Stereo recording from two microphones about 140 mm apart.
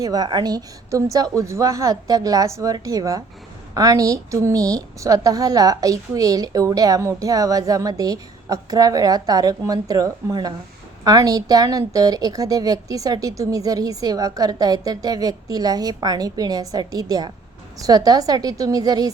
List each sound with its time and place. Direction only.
0.0 s a woman's voice: 30° right (ahead or behind)